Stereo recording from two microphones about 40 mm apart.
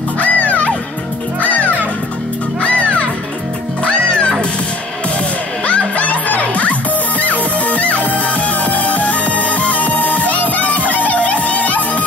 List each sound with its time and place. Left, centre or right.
0.2 s music: left
2.6 s music: left
5.7 s music: left